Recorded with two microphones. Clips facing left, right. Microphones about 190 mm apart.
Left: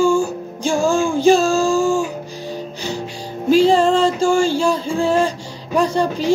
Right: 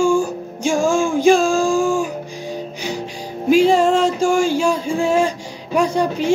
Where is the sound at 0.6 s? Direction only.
10° right (ahead or behind).